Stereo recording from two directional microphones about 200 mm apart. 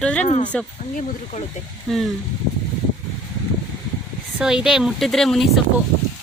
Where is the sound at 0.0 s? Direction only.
5° left (ahead or behind).